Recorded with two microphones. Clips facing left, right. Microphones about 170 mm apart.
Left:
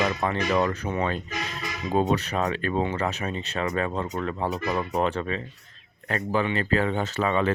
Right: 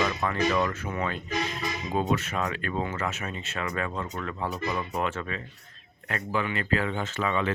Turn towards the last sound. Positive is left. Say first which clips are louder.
# left 4 dB
turn(degrees=35)  # may be behind; listen again after turning